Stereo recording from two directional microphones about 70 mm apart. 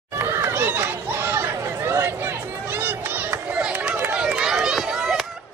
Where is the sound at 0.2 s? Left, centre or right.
Right.